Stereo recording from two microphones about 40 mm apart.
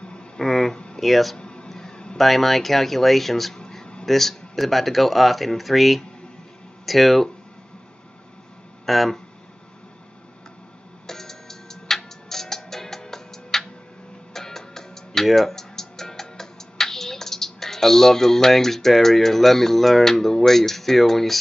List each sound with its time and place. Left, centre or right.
0.0 s a sound: left
0.4 s speech: centre
1.4 s a sound: left
2.1 s speech: centre
3.5 s a sound: centre
4.0 s speech: centre
8.8 s speech: centre
11.1 s music: centre
15.2 s speech: centre